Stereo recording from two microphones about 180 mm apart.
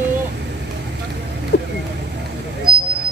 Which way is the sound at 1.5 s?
65° left (ahead or behind).